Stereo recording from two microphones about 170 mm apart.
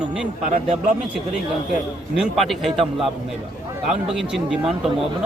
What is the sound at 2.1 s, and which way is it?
A man's voice, centre (ahead or behind).